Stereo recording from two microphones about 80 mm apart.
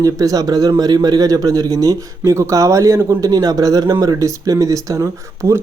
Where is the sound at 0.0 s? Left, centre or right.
Right.